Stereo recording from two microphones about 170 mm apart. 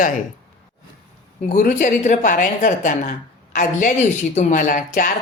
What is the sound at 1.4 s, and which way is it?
A woman's voice, 50° left (ahead or behind).